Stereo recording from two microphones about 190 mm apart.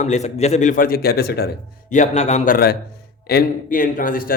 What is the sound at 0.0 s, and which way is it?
A man's voice, 35° left (ahead or behind).